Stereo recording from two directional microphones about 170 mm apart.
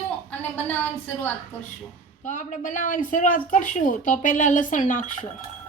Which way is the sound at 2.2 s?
45° left (ahead or behind).